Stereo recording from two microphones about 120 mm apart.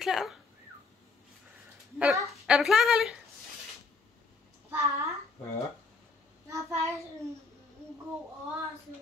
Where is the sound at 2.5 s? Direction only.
5° right (ahead or behind).